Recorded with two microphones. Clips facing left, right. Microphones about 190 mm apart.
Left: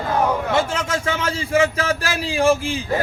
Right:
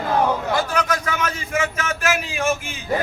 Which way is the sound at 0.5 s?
25° left (ahead or behind).